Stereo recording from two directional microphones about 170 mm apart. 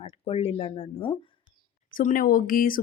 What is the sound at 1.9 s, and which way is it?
Speech, 55° left (ahead or behind).